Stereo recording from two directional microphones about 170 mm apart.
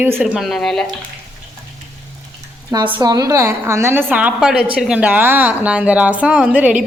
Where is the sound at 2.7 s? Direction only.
25° right (ahead or behind).